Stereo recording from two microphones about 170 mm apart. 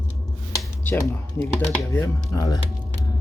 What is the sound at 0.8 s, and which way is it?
Speech, 15° left (ahead or behind).